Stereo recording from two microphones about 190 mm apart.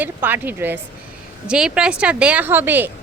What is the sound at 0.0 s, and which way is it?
Speech, 10° right (ahead or behind).